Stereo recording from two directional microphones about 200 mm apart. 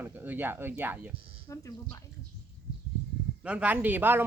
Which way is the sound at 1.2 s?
25° right (ahead or behind).